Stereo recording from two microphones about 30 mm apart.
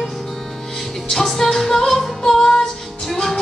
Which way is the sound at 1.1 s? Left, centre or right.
Centre.